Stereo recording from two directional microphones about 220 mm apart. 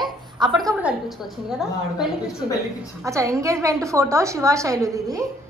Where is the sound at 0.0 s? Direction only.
20° right (ahead or behind).